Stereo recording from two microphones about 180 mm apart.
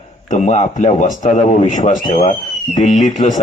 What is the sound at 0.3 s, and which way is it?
A man's voice, 40° left (ahead or behind).